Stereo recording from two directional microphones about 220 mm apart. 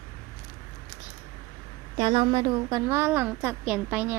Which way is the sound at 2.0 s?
25° right (ahead or behind).